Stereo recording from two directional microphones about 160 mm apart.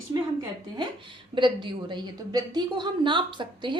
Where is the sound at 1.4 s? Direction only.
30° right (ahead or behind).